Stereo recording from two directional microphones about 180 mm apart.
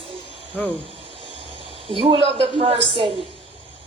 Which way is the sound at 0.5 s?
10° right (ahead or behind).